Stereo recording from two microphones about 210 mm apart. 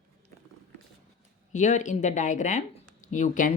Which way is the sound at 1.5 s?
35° left (ahead or behind).